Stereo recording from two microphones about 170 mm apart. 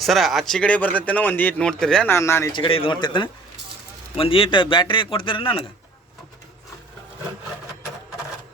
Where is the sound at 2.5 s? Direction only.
30° left (ahead or behind).